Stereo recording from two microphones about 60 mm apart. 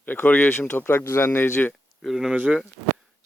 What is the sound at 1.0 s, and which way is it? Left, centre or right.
Speech, left.